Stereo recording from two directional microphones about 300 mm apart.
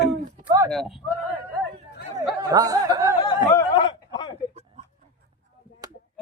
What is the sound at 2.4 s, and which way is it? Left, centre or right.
Speech, centre.